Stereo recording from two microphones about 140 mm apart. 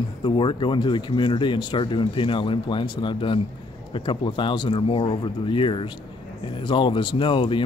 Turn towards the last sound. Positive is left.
turn(degrees=35)  # may be behind; listen again after turning